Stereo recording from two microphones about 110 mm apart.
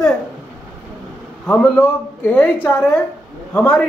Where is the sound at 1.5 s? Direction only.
15° left (ahead or behind).